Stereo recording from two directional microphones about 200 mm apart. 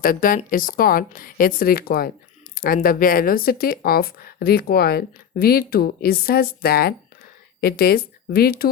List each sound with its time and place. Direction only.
0.0 s speech: 45° left (ahead or behind)